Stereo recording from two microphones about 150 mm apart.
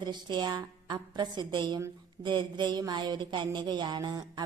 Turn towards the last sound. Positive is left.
turn(degrees=-25)  # may be behind; listen again after turning